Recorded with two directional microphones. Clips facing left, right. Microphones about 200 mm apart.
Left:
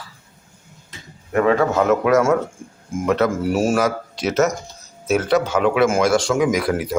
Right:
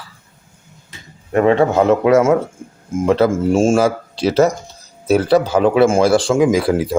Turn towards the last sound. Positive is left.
turn(degrees=-30)  # may be behind; listen again after turning